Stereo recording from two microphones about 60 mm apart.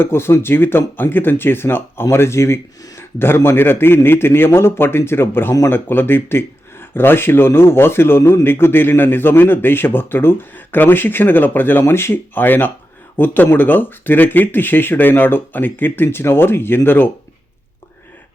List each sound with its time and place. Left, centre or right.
0.0 s speech: left
11.8 s speech: left